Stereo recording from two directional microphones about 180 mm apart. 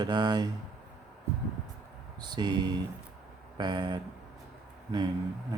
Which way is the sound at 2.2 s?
25° right (ahead or behind).